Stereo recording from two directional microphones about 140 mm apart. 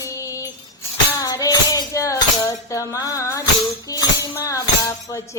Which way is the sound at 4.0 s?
25° left (ahead or behind).